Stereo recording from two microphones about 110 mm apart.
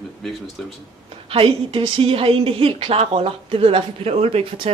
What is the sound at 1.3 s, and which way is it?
Speech, 55° right (ahead or behind).